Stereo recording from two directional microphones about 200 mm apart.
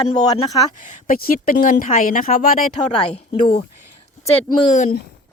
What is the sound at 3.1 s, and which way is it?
Speech, 25° left (ahead or behind).